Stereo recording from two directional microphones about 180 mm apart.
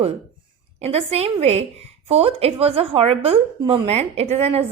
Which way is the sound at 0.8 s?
35° right (ahead or behind).